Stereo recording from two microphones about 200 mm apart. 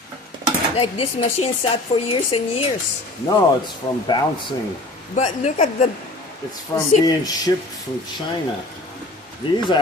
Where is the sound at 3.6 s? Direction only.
20° left (ahead or behind).